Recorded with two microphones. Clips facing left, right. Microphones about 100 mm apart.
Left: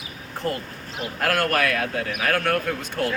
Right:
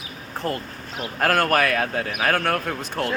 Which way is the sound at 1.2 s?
45° right (ahead or behind).